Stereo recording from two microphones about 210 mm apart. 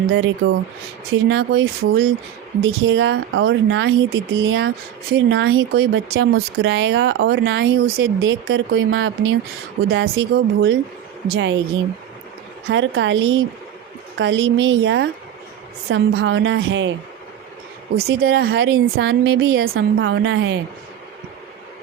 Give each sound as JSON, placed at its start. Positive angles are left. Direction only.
{"t": 0.2, "sound": "a woman's voice", "side_deg": -65}
{"t": 1.1, "sound": "speech", "side_deg": -55}
{"t": 2.6, "sound": "speech", "side_deg": -70}
{"t": 9.9, "sound": "a woman's voice", "side_deg": -70}
{"t": 12.6, "sound": "speech", "side_deg": -60}
{"t": 18.2, "sound": "speech", "side_deg": -50}
{"t": 18.4, "sound": "speech", "side_deg": -60}